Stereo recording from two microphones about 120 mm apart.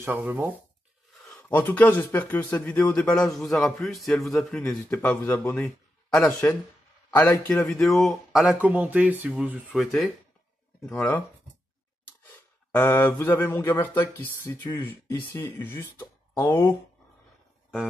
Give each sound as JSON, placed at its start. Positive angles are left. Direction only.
{"t": 0.0, "sound": "speech", "side_deg": -15}
{"t": 1.6, "sound": "speech", "side_deg": 15}
{"t": 4.8, "sound": "speech", "side_deg": 20}
{"t": 9.8, "sound": "speech", "side_deg": 0}
{"t": 10.9, "sound": "speech", "side_deg": 15}
{"t": 12.9, "sound": "speech", "side_deg": 15}